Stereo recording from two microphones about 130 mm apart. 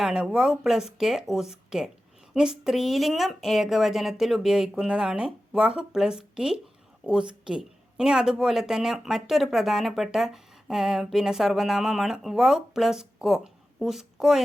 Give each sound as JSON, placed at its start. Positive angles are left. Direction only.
{"t": 0.0, "sound": "speech", "side_deg": -5}